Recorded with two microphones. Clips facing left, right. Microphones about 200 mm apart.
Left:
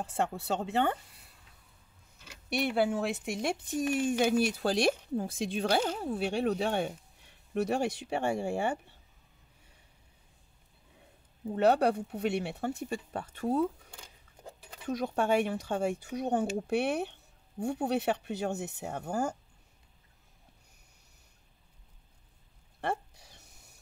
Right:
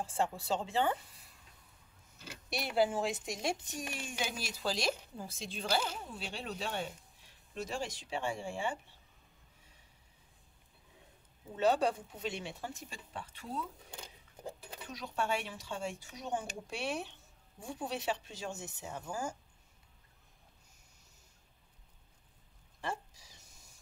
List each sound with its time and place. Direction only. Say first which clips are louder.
0.1 s speech: left 3 dB; 65° left (ahead or behind)
2.5 s speech: left 3 dB; 60° left (ahead or behind)
11.5 s speech: left 5 dB; 65° left (ahead or behind)
14.9 s speech: left 8 dB; 55° left (ahead or behind)
22.8 s a sound: left 6 dB; 60° left (ahead or behind)